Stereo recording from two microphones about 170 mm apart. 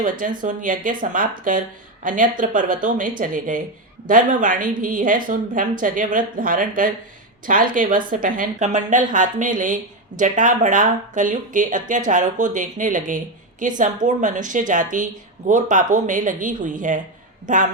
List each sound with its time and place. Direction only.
0.0 s speech: 50° right (ahead or behind)